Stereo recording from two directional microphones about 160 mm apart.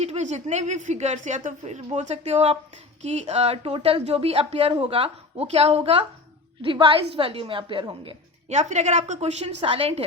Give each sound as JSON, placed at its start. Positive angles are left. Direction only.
{"t": 0.0, "sound": "a woman's voice", "side_deg": -40}
{"t": 8.4, "sound": "a woman's voice", "side_deg": -45}